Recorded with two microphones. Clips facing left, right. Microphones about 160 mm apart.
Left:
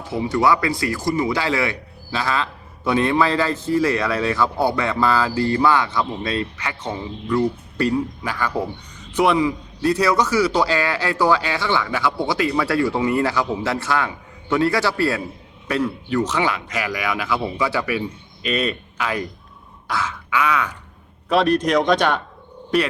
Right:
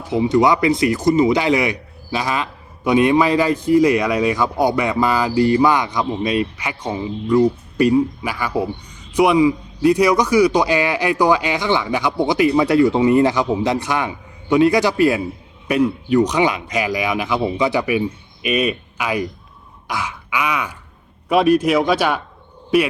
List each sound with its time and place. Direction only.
0.1 s speech: 20° right (ahead or behind)
19.9 s throat clearing: 15° right (ahead or behind)
21.2 s speech: 10° right (ahead or behind)